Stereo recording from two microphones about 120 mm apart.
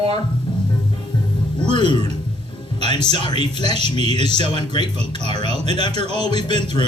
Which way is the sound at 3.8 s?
60° right (ahead or behind).